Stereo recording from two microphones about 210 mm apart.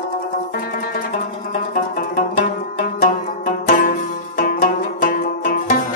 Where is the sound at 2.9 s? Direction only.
40° left (ahead or behind).